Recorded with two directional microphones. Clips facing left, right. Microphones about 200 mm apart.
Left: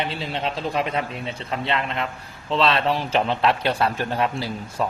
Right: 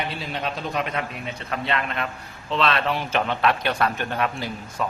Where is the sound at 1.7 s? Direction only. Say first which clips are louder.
Left 1 dB; 25° left (ahead or behind).